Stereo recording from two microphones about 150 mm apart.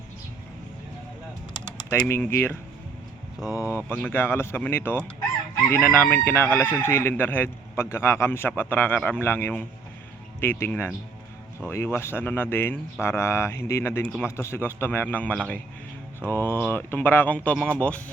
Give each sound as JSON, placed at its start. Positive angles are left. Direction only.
{"t": 1.9, "sound": "speech", "side_deg": 15}
{"t": 3.6, "sound": "speech", "side_deg": -10}
{"t": 3.8, "sound": "speech", "side_deg": 15}